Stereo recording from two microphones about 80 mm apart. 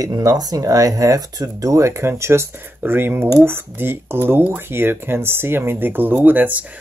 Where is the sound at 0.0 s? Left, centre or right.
Right.